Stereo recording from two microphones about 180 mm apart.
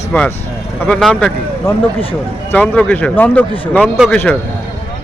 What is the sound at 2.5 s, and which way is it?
Speech, 10° left (ahead or behind).